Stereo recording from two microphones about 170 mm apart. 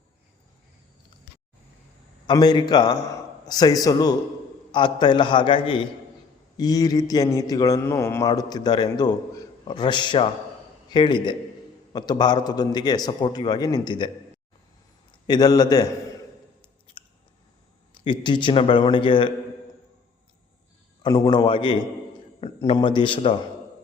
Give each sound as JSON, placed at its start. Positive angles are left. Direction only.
{"t": 2.2, "sound": "a man's voice", "side_deg": 25}
{"t": 15.3, "sound": "speech", "side_deg": 25}
{"t": 17.9, "sound": "speech", "side_deg": 30}
{"t": 21.0, "sound": "speech", "side_deg": 25}